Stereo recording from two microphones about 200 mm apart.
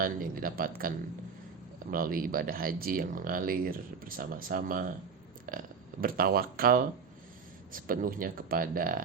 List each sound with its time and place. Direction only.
0.0 s speech: 45° right (ahead or behind)